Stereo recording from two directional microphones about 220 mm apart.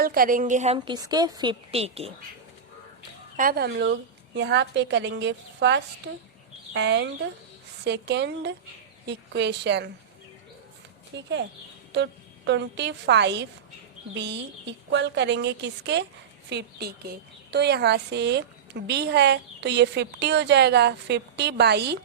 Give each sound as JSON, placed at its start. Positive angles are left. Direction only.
{"t": 0.0, "sound": "a woman's voice", "side_deg": -40}
{"t": 0.9, "sound": "a woman's voice", "side_deg": -15}
{"t": 3.3, "sound": "a woman's voice", "side_deg": -40}
{"t": 11.1, "sound": "a woman's voice", "side_deg": -50}
{"t": 12.5, "sound": "a woman's voice", "side_deg": -55}